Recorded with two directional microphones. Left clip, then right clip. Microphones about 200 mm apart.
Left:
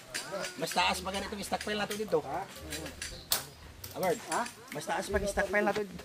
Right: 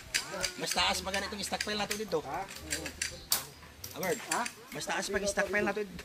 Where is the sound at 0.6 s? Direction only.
55° left (ahead or behind).